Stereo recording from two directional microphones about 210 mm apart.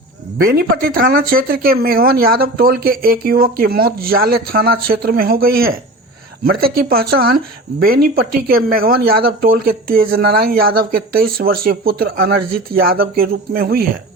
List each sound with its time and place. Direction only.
0.4 s speech: 45° right (ahead or behind)